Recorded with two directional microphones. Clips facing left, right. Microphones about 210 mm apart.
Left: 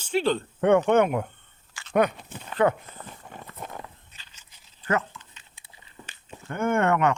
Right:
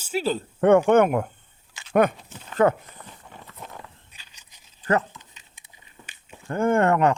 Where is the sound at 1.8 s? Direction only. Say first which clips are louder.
Even; 20° right (ahead or behind).